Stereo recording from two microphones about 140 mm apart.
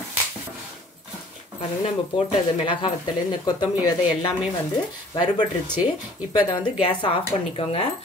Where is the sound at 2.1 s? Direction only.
35° left (ahead or behind).